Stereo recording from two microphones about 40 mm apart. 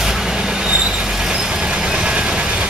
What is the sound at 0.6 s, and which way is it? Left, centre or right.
Vehicle, right.